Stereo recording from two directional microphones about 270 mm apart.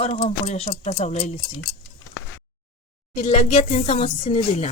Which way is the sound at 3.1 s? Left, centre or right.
Left.